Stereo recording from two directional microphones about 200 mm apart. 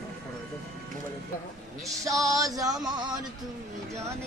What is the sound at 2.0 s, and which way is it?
Music, 15° right (ahead or behind).